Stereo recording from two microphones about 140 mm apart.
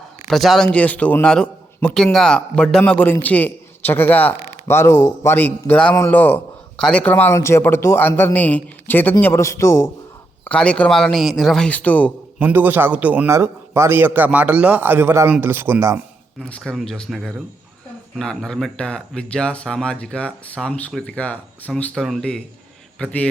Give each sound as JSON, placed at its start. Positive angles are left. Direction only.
{"t": 0.3, "sound": "a man's voice", "side_deg": 0}
{"t": 10.4, "sound": "speech", "side_deg": 5}
{"t": 12.4, "sound": "a man's voice", "side_deg": -15}
{"t": 16.4, "sound": "a man's voice", "side_deg": 5}